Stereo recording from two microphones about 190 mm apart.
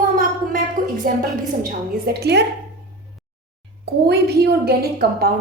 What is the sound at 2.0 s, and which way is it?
Speech, 60° right (ahead or behind).